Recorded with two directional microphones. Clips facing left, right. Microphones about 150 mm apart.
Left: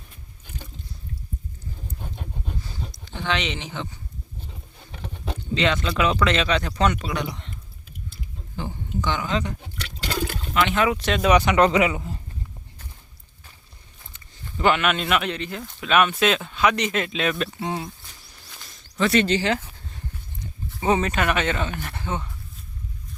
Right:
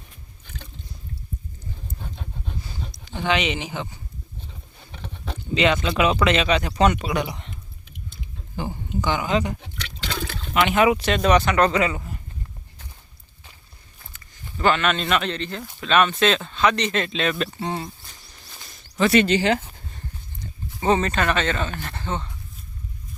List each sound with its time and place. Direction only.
2.0 s pant: 10° left (ahead or behind)
3.0 s speech: 10° right (ahead or behind)
4.9 s a sound: 10° left (ahead or behind)
5.5 s speech: 10° right (ahead or behind)
8.5 s a sound: 10° right (ahead or behind)
9.6 s water: 10° left (ahead or behind)
10.5 s speech: 10° right (ahead or behind)
11.0 s speech: centre (ahead or behind)
14.6 s speech: 15° left (ahead or behind)
18.9 s speech: 5° right (ahead or behind)
20.8 s speech: 10° left (ahead or behind)